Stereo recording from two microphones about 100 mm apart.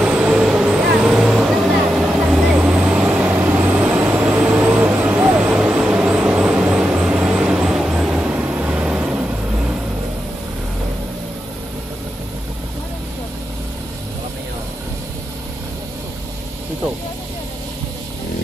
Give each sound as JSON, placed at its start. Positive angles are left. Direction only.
{"t": 0.0, "sound": "vehicle", "side_deg": -15}